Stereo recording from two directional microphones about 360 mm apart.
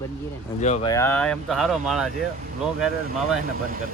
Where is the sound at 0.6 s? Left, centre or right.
Centre.